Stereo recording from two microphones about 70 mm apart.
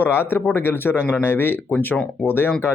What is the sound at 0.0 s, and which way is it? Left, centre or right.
Speech, left.